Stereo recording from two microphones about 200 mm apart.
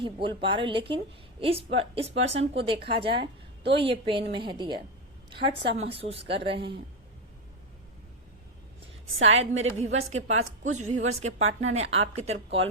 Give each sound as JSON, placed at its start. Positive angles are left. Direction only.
{"t": 0.0, "sound": "a woman's voice", "side_deg": -25}
{"t": 9.1, "sound": "a woman's voice", "side_deg": -75}
{"t": 10.1, "sound": "a woman's voice", "side_deg": -35}
{"t": 11.1, "sound": "a woman's voice", "side_deg": -85}
{"t": 11.7, "sound": "a woman's voice", "side_deg": -30}